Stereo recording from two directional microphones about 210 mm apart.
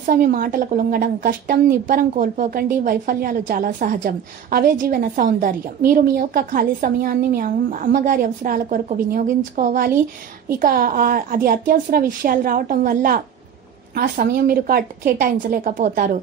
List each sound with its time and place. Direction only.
0.0 s a woman's voice: 40° right (ahead or behind)